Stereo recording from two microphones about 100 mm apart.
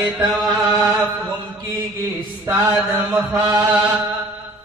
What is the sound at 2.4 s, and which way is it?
Mantra, 30° right (ahead or behind).